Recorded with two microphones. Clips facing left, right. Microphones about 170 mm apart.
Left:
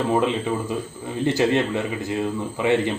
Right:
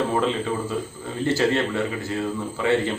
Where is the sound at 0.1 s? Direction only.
15° left (ahead or behind).